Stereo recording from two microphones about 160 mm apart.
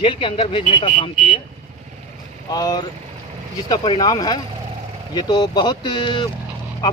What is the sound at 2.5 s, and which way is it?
Speech, 25° left (ahead or behind).